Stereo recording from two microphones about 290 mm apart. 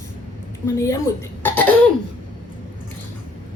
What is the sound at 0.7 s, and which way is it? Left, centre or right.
Speech, centre.